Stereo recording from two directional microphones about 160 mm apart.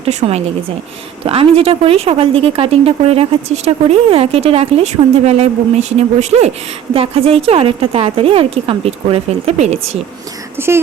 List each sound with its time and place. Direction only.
0.0 s speech: 40° right (ahead or behind)
10.6 s speech: 15° right (ahead or behind)